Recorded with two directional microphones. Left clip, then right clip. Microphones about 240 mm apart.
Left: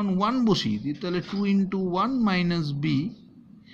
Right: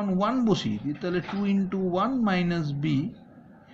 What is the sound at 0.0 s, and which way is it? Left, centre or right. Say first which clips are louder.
Speech: left 1 dB; left.